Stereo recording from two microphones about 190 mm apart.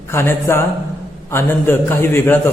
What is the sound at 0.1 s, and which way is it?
A man's voice, 15° left (ahead or behind).